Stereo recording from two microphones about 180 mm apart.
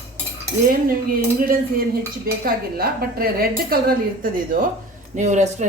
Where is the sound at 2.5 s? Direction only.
55° right (ahead or behind).